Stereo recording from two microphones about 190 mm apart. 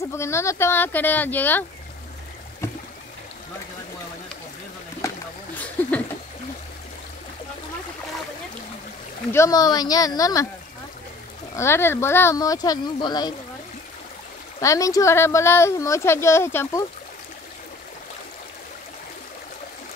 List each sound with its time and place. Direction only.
0.1 s speech: 15° left (ahead or behind)
5.8 s speech: 10° left (ahead or behind)
9.3 s speech: 15° left (ahead or behind)
11.5 s speech: 15° left (ahead or behind)
14.6 s speech: 15° left (ahead or behind)